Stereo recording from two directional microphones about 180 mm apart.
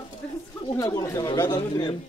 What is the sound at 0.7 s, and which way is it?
Speech, 15° left (ahead or behind).